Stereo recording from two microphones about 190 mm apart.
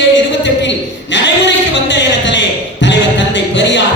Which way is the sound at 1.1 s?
70° left (ahead or behind).